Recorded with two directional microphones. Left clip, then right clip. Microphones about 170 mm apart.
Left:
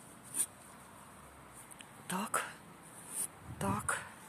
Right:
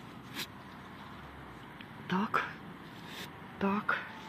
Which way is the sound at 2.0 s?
35° left (ahead or behind).